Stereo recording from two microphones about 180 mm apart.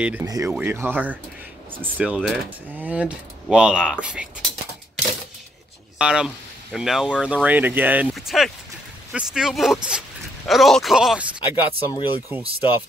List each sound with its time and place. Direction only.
0.0 s speech: 10° right (ahead or behind)
5.9 s speech: 5° right (ahead or behind)
11.5 s speech: 25° left (ahead or behind)
12.3 s speech: 10° right (ahead or behind)